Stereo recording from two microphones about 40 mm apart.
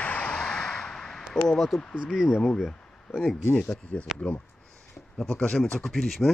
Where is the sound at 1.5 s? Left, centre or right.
Centre.